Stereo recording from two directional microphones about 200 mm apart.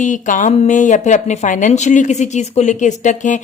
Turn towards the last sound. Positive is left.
turn(degrees=40)  # may be behind; listen again after turning